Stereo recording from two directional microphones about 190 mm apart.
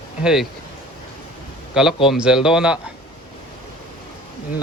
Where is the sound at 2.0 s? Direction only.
Centre (ahead or behind).